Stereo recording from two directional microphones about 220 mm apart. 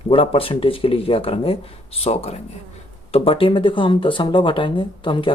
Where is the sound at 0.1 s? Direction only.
25° left (ahead or behind).